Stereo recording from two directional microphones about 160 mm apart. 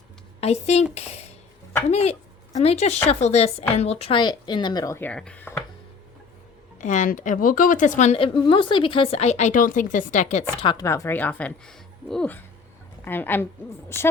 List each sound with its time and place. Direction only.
0.3 s speech: 40° left (ahead or behind); by 4.9 s 25° left (ahead or behind)
4.9 s speech: 5° left (ahead or behind)
6.7 s a woman's voice: 50° left (ahead or behind)
10.6 s speech: 30° left (ahead or behind)
10.8 s speech: 15° left (ahead or behind)